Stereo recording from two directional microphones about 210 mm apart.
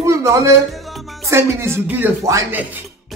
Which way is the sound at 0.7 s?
Centre (ahead or behind).